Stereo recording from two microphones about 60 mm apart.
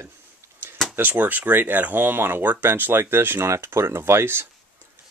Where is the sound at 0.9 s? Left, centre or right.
Right.